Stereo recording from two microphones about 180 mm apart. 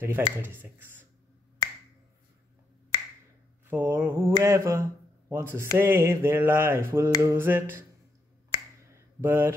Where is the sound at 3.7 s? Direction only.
10° right (ahead or behind).